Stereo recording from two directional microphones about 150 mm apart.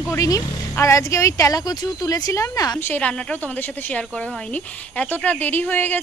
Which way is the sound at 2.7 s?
10° left (ahead or behind).